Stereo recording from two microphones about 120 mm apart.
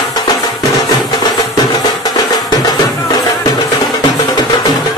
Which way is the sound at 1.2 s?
35° left (ahead or behind).